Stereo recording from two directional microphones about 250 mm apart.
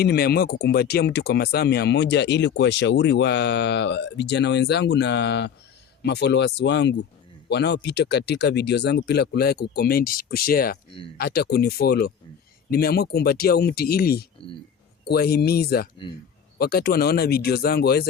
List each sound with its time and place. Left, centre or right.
0.0 s speech: left